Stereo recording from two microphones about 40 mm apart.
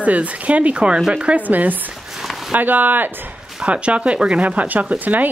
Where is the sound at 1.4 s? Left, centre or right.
Right.